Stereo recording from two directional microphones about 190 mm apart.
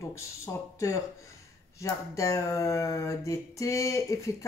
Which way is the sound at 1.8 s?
15° left (ahead or behind).